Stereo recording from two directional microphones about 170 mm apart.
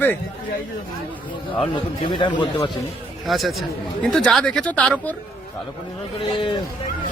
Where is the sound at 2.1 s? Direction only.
30° left (ahead or behind).